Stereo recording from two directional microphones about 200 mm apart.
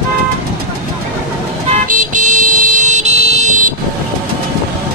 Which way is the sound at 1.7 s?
40° right (ahead or behind).